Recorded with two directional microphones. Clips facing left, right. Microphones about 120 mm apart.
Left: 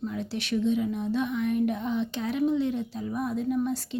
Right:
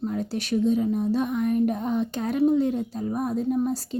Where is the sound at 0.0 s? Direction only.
45° right (ahead or behind).